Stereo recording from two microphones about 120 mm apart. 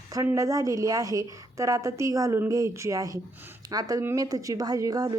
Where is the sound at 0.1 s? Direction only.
25° right (ahead or behind).